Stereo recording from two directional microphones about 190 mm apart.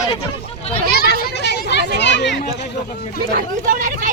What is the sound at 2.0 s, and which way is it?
Speech, 65° left (ahead or behind).